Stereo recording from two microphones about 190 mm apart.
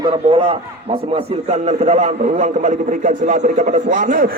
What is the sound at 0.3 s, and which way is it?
A man's voice, 30° right (ahead or behind).